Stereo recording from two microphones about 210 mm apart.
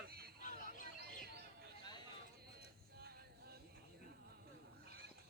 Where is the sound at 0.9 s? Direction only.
50° right (ahead or behind).